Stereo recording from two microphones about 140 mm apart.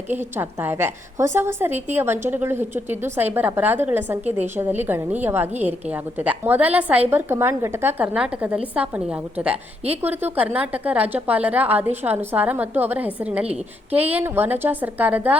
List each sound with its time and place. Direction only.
0.3 s a woman's voice: 15° right (ahead or behind)